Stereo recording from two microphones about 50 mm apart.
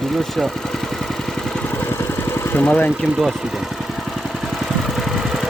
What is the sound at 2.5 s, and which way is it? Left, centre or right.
Speech, left.